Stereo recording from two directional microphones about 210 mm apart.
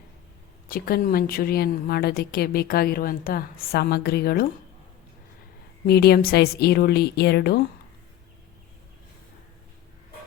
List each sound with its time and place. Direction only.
0.7 s a woman's voice: 45° left (ahead or behind)
5.8 s a woman's voice: 50° left (ahead or behind)